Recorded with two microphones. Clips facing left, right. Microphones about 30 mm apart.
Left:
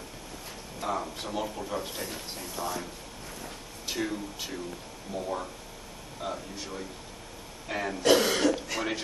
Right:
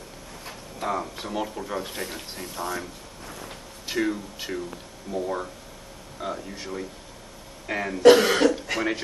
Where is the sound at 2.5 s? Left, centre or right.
Centre.